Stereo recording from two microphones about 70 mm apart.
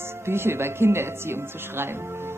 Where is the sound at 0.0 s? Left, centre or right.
Right.